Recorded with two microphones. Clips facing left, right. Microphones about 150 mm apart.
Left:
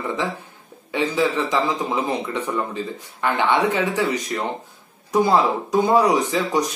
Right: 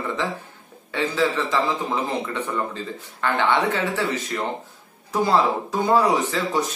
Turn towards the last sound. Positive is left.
turn(degrees=15)  # may be behind; listen again after turning